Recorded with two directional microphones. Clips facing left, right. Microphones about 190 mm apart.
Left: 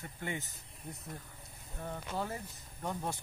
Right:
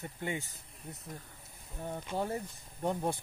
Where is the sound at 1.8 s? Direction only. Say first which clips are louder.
Right 3 dB; 15° right (ahead or behind).